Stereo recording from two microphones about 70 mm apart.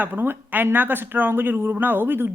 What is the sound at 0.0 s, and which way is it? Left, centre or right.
Speech, right.